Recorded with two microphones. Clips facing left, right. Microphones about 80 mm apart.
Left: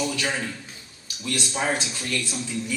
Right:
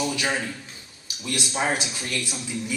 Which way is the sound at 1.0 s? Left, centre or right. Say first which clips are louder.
Left 1 dB; centre.